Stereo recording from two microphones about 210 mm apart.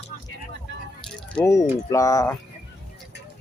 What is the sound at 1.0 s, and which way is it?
Speech, 5° left (ahead or behind).